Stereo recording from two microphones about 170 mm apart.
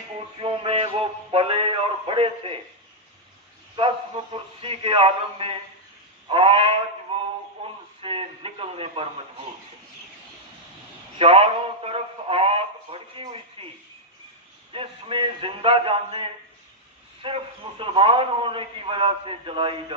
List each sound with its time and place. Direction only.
0.4 s a man's voice: 30° right (ahead or behind)
3.7 s a man's voice: 30° right (ahead or behind)
6.2 s a sound: 30° right (ahead or behind)
7.6 s radio: 35° right (ahead or behind)
11.1 s a man's voice: 35° right (ahead or behind)